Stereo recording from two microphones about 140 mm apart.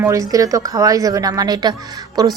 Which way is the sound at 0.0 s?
25° right (ahead or behind).